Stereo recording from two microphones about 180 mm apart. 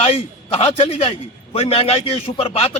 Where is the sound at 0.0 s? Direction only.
30° left (ahead or behind).